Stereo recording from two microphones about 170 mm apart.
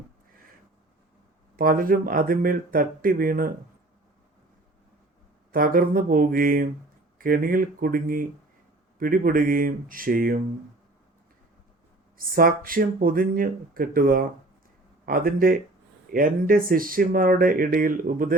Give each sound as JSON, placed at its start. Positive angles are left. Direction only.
{"t": 1.5, "sound": "speech", "side_deg": -55}
{"t": 5.5, "sound": "speech", "side_deg": -55}
{"t": 12.1, "sound": "speech", "side_deg": -55}